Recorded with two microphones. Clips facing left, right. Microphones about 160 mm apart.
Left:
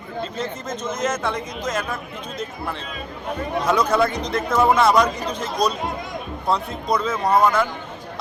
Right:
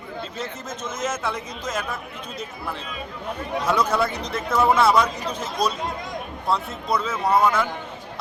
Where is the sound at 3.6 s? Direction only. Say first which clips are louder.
Left 3 dB; 5° right (ahead or behind).